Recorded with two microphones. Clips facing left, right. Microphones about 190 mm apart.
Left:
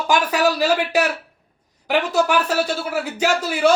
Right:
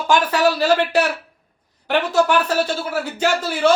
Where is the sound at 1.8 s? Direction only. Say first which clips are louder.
Right 1 dB; 10° left (ahead or behind).